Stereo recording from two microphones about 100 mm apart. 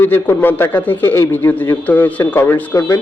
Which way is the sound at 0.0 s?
20° left (ahead or behind).